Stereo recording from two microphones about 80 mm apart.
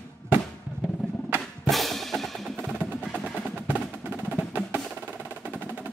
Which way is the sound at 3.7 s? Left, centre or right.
Right.